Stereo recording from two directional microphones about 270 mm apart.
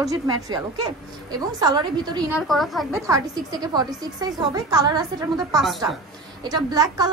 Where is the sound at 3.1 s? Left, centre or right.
Centre.